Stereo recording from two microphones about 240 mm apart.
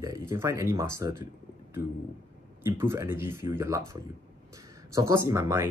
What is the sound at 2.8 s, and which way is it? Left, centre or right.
Speech, centre.